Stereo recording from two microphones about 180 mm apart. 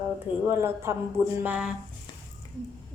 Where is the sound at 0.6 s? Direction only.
15° right (ahead or behind).